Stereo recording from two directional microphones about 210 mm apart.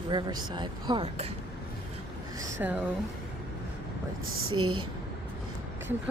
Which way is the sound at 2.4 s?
10° right (ahead or behind).